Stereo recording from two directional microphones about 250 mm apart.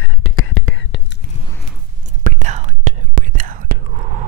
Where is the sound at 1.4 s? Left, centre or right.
Centre.